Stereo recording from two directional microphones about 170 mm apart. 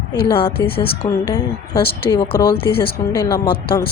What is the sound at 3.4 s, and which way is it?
Speech, 65° left (ahead or behind).